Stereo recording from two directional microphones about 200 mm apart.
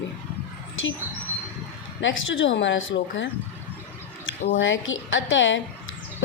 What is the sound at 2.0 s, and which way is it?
A woman's voice, 70° left (ahead or behind).